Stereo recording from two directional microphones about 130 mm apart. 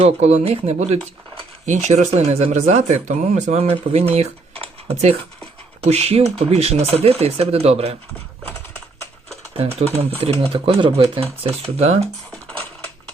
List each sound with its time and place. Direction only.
0.0 s speech: 60° right (ahead or behind)
1.6 s speech: 65° right (ahead or behind)
4.6 s a sound: 55° right (ahead or behind)
5.8 s speech: 50° right (ahead or behind)
9.6 s speech: 50° right (ahead or behind)
12.3 s music: 10° left (ahead or behind)